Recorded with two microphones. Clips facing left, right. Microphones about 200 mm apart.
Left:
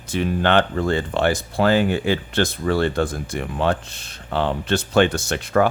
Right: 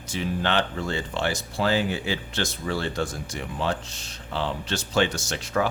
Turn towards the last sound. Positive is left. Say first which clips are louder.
# left 7 dB
turn(degrees=60)  # may be behind; listen again after turning